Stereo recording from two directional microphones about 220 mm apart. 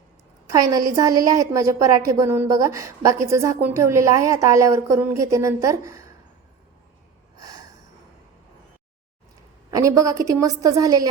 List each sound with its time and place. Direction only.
0.7 s a woman's voice: 15° right (ahead or behind)
7.3 s a sound: 15° right (ahead or behind)
9.7 s a woman's voice: 15° right (ahead or behind)